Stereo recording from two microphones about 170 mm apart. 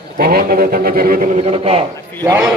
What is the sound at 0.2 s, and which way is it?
A man's voice, 60° right (ahead or behind).